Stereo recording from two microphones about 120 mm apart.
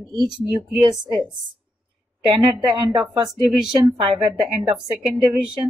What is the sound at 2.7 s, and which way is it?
Speech, 35° right (ahead or behind).